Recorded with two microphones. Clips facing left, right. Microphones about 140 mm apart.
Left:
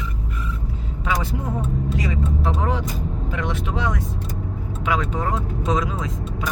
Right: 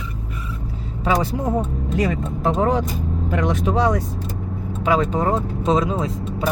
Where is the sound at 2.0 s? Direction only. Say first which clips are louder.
Right 3 dB; 50° right (ahead or behind); by 6.5 s 30° right (ahead or behind).